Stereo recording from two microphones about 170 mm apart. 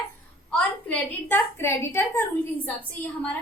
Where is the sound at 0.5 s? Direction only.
10° left (ahead or behind).